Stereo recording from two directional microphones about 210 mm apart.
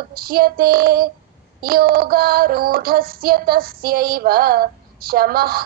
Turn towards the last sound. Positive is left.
turn(degrees=-45)  # may be behind; listen again after turning